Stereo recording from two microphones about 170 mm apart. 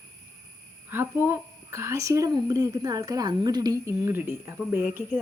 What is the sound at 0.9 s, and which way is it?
A woman's voice, 15° right (ahead or behind).